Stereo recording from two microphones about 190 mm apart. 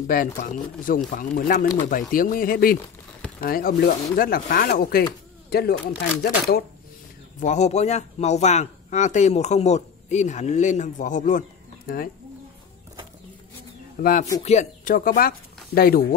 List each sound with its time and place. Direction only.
0.0 s speech: 50° left (ahead or behind)
7.3 s speech: 40° left (ahead or behind)
14.0 s speech: 50° left (ahead or behind)
14.4 s speech: 35° left (ahead or behind)